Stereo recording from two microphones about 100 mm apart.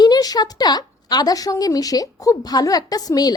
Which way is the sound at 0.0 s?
40° left (ahead or behind).